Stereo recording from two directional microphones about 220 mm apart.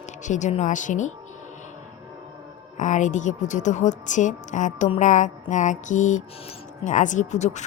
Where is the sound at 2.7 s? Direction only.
35° left (ahead or behind).